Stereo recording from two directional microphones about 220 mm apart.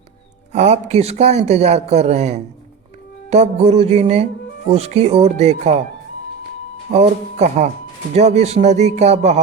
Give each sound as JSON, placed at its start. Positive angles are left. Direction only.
{"t": 0.5, "sound": "a man's voice", "side_deg": -30}
{"t": 6.9, "sound": "a man's voice", "side_deg": -30}